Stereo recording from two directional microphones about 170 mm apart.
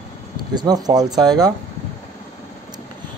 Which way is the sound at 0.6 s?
25° right (ahead or behind).